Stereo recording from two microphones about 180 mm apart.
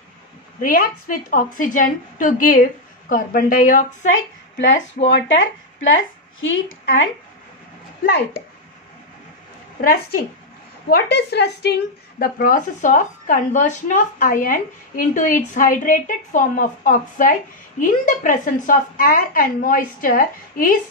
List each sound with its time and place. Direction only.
0.6 s a woman's voice: 50° left (ahead or behind)
5.1 s speech: 90° left
9.8 s a woman's voice: 55° left (ahead or behind)
11.0 s a woman's voice: 65° left (ahead or behind)